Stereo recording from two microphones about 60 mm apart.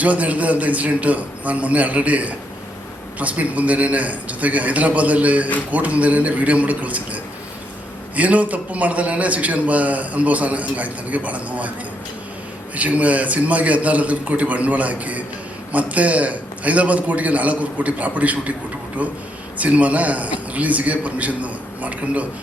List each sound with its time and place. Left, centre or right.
0.0 s a man's voice: right
12.7 s a man's voice: right